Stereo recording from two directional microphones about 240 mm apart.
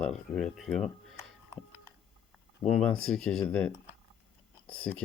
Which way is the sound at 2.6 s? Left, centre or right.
Centre.